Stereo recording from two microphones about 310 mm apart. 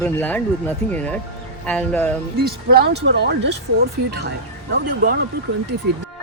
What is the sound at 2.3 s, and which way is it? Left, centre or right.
Speech, right.